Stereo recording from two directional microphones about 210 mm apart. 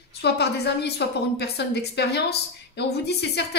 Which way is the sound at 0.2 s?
50° left (ahead or behind).